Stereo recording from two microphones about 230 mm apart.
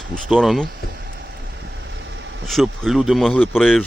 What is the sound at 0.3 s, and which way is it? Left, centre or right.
Speech, centre.